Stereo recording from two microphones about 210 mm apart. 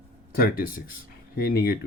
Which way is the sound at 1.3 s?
45° left (ahead or behind).